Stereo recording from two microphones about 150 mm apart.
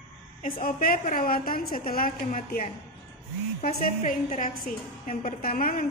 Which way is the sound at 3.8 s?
65° left (ahead or behind).